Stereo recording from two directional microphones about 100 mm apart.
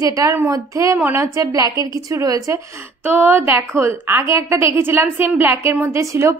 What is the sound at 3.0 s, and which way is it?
A woman's voice, 20° right (ahead or behind).